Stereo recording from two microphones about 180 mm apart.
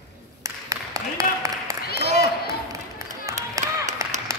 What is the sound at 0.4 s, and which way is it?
Applause, 20° right (ahead or behind).